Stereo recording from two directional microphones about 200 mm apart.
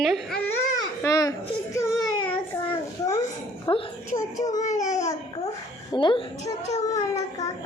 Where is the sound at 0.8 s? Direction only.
15° left (ahead or behind).